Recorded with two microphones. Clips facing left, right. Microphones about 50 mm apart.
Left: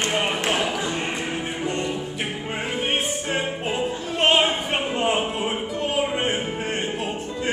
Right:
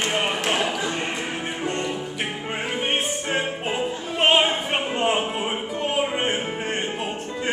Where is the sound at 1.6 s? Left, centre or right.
Right.